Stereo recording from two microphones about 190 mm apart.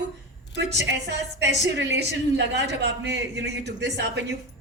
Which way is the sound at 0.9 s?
65° right (ahead or behind).